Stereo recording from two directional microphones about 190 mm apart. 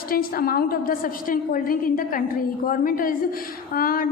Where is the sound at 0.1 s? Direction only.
50° left (ahead or behind).